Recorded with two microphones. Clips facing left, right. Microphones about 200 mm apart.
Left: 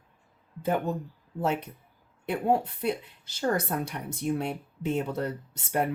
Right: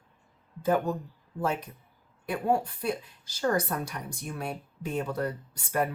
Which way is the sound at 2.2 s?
25° left (ahead or behind).